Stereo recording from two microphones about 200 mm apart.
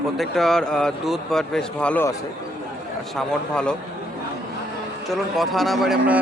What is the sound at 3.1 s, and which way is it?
Speech, 5° left (ahead or behind).